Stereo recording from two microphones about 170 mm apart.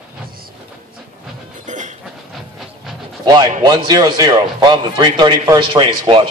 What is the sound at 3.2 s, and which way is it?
Speech, 25° right (ahead or behind).